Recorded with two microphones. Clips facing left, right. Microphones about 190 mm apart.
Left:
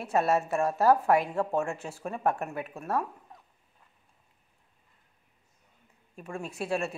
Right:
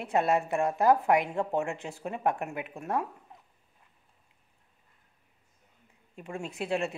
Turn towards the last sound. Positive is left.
turn(degrees=-20)  # may be behind; listen again after turning